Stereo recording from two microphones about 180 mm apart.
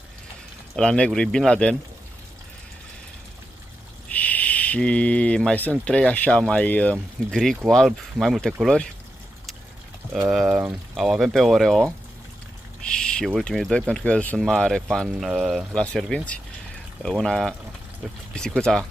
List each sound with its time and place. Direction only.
0.7 s speech: 5° left (ahead or behind)
4.1 s speech: 10° left (ahead or behind)
11.0 s speech: centre (ahead or behind)